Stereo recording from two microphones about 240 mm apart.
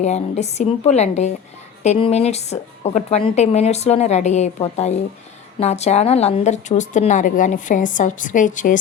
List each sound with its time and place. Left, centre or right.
0.0 s a woman's voice: left